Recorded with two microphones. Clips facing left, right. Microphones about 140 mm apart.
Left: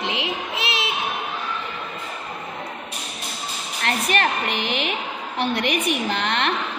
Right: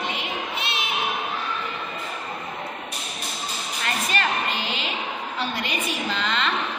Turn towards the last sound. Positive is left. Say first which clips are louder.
# left 3 dB
turn(degrees=65)  # may be behind; listen again after turning